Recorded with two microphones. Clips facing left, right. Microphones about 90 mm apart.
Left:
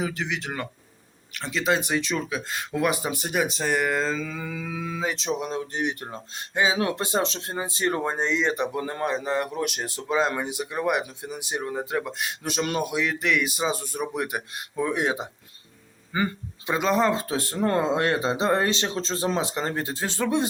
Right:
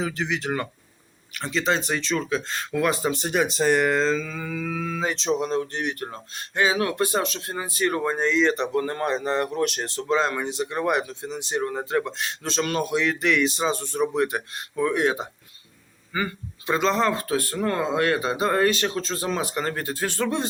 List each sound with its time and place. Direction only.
0.0 s speech: centre (ahead or behind)
12.9 s speech: 5° left (ahead or behind)